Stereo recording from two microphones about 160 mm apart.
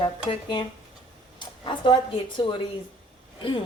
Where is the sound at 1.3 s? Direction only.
30° left (ahead or behind).